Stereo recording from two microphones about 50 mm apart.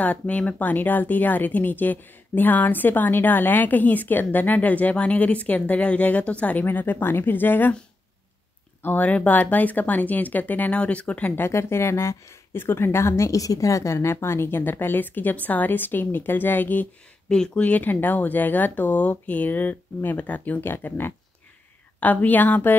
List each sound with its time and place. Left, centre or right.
0.0 s a woman's voice: left
6.6 s speech: left
8.8 s a woman's voice: left
11.3 s speech: left
17.3 s speech: centre
17.6 s a woman's voice: left
20.6 s speech: left
22.0 s a woman's voice: left